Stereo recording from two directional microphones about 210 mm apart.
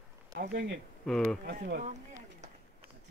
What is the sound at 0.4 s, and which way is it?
Speech, 55° right (ahead or behind).